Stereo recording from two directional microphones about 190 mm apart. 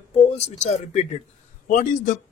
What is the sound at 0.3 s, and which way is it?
Speech, 35° left (ahead or behind).